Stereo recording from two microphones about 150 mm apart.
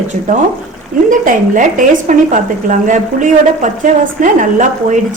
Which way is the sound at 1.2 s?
65° right (ahead or behind).